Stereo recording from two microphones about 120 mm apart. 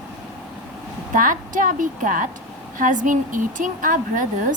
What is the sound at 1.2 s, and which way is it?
Speech, 90° right.